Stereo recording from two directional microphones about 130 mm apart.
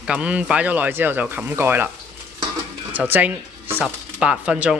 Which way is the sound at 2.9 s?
15° right (ahead or behind).